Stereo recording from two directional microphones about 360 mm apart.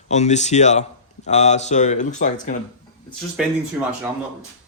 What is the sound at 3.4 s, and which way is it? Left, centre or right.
Speech, centre.